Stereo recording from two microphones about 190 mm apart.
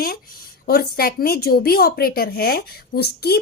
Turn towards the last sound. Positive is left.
turn(degrees=55)  # may be behind; listen again after turning